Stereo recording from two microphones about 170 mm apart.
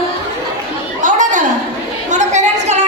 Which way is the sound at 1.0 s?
50° right (ahead or behind).